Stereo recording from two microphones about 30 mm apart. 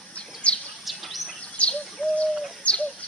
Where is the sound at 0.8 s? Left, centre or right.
Centre.